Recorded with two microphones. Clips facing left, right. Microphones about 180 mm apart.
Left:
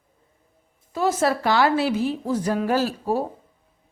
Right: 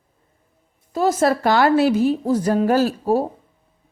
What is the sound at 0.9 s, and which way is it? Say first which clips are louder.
A woman's voice: right 4 dB; 40° right (ahead or behind).